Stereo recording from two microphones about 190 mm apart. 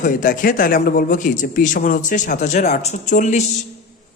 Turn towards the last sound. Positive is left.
turn(degrees=40)  # may be behind; listen again after turning